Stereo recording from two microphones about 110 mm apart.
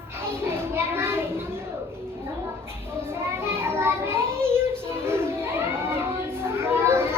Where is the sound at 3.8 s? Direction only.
20° right (ahead or behind).